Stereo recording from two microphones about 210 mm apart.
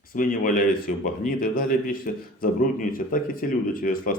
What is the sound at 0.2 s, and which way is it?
A man's voice, 40° left (ahead or behind).